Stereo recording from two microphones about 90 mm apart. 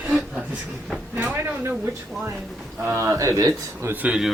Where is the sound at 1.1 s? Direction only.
20° right (ahead or behind).